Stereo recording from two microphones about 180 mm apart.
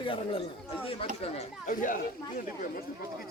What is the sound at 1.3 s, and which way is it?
Speech, 45° left (ahead or behind).